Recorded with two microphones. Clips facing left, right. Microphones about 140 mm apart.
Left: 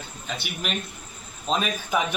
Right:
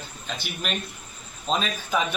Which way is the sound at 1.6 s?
10° left (ahead or behind).